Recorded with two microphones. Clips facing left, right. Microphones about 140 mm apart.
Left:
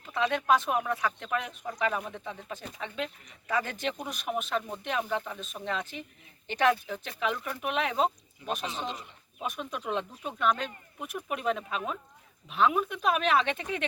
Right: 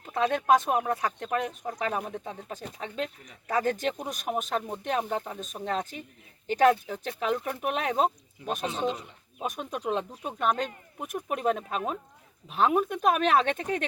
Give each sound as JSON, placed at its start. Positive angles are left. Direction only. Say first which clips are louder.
{"t": 0.0, "sound": "speech", "louder": "right 2 dB", "side_deg": -45}